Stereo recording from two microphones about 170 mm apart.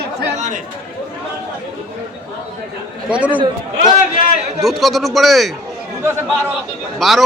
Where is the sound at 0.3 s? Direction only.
45° right (ahead or behind).